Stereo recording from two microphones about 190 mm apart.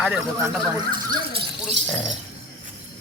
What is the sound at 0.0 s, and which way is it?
Speech, centre (ahead or behind).